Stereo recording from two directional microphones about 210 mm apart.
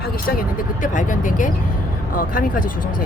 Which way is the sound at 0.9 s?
40° left (ahead or behind).